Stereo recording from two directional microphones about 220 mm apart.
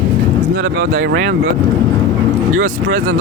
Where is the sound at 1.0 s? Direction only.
60° right (ahead or behind).